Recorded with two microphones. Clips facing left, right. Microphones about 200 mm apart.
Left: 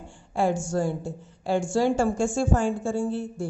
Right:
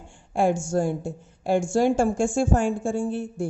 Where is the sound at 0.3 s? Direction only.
50° right (ahead or behind).